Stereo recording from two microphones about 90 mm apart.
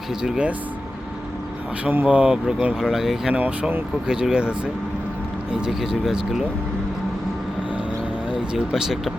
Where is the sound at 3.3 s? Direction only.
15° right (ahead or behind).